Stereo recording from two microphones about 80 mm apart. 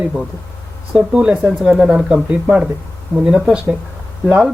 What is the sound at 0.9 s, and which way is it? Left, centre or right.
Speech, centre.